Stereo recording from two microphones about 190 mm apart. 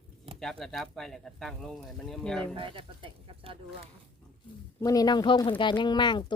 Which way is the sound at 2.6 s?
25° right (ahead or behind).